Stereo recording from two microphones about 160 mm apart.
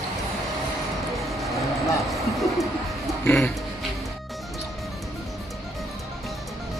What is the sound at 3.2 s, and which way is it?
Music, 10° left (ahead or behind).